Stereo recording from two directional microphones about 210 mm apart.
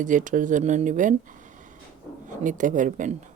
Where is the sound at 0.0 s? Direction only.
35° right (ahead or behind).